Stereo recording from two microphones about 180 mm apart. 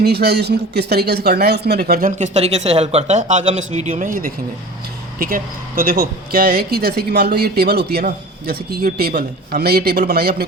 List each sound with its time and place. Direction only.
0.0 s a man's voice: 65° right (ahead or behind)